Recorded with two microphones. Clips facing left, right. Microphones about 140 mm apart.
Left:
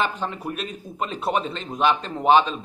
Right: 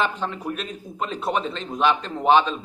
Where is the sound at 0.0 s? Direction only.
5° left (ahead or behind).